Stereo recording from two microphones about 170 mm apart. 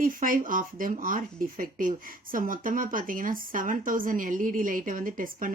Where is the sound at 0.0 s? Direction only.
55° right (ahead or behind).